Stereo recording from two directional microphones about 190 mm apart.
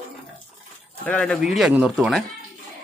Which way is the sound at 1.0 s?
5° left (ahead or behind).